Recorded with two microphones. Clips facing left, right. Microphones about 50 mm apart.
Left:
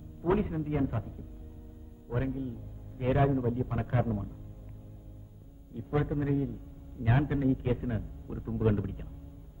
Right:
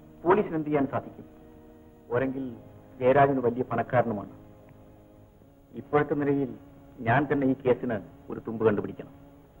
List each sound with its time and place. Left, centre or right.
0.2 s a man's voice: right
5.8 s a man's voice: right